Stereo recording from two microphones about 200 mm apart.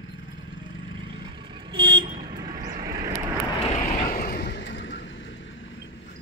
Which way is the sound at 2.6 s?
45° right (ahead or behind).